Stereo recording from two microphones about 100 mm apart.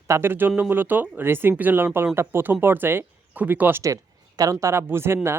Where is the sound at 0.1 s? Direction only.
20° right (ahead or behind).